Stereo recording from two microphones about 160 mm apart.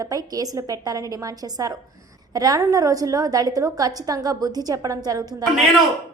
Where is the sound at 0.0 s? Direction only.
20° right (ahead or behind).